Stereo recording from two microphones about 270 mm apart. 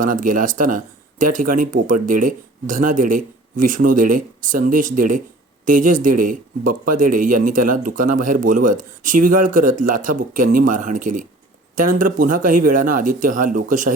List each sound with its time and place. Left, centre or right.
0.0 s speech: right